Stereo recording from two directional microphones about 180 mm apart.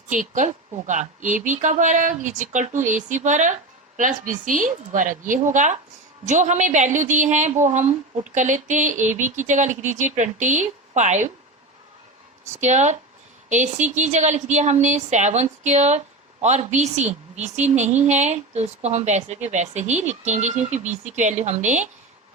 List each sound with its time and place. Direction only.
0.1 s a woman's voice: 45° right (ahead or behind)
12.5 s a woman's voice: 40° right (ahead or behind)